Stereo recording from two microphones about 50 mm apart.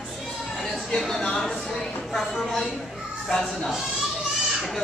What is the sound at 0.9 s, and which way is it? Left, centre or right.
Speech, centre.